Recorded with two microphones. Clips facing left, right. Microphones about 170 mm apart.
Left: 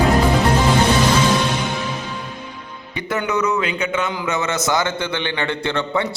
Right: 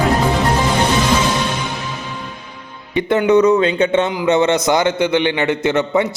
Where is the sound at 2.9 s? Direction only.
25° right (ahead or behind).